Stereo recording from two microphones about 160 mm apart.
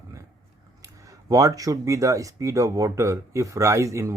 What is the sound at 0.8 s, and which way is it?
Speech, 20° right (ahead or behind).